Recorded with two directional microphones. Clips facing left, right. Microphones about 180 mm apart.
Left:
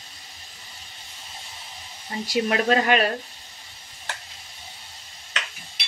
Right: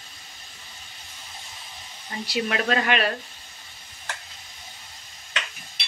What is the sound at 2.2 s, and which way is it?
Speech, 45° left (ahead or behind).